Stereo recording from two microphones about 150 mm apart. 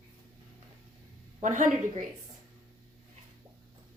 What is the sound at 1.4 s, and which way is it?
Speech, 55° right (ahead or behind).